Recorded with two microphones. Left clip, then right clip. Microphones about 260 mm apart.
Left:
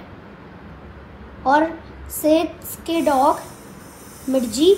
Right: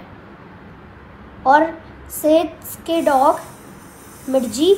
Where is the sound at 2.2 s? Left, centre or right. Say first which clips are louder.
Right 2 dB; centre.